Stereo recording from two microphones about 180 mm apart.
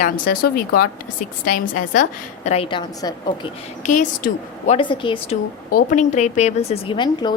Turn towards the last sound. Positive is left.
turn(degrees=25)  # may be behind; listen again after turning